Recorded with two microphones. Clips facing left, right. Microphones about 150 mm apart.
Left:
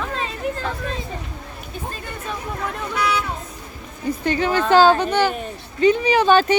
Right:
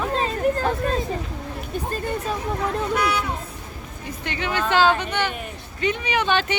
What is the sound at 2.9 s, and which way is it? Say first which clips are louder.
Speech: left 3 dB; 55° right (ahead or behind).